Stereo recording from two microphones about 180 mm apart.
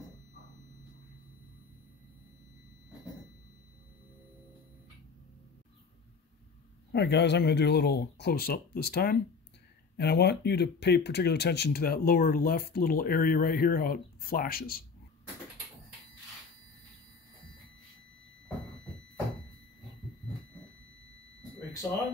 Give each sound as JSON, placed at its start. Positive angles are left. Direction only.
{"t": 6.9, "sound": "speech", "side_deg": 70}